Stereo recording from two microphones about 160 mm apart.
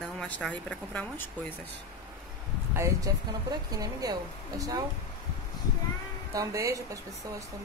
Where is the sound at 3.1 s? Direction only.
20° right (ahead or behind).